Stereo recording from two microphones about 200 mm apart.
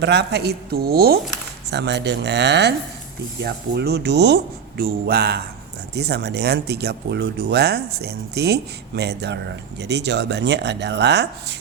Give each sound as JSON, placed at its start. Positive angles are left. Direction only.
{"t": 0.0, "sound": "speech", "side_deg": -55}